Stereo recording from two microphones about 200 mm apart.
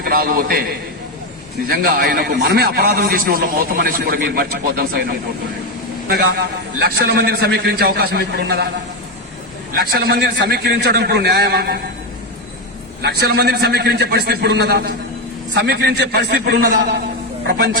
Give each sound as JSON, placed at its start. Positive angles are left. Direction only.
{"t": 0.0, "sound": "a man's voice", "side_deg": -50}
{"t": 9.7, "sound": "a man's voice", "side_deg": -50}
{"t": 13.0, "sound": "a man's voice", "side_deg": -55}